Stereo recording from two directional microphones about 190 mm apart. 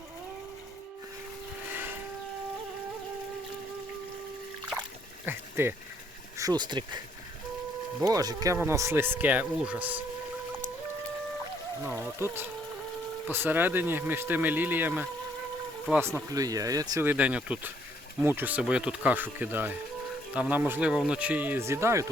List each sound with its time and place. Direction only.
1.7 s train: 10° right (ahead or behind)
4.7 s a sound: 5° right (ahead or behind)
6.3 s speech: 20° right (ahead or behind)
8.0 s speech: 20° right (ahead or behind)
11.9 s speech: centre (ahead or behind)
12.2 s speech: 10° right (ahead or behind)